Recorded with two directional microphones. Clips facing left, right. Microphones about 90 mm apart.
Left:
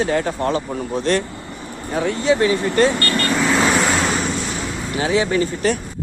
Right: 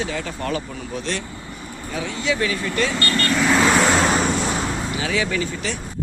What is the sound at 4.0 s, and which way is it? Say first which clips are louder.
Vehicle: right 2 dB; 35° right (ahead or behind).